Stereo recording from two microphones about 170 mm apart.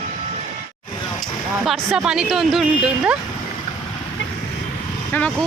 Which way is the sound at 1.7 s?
5° right (ahead or behind).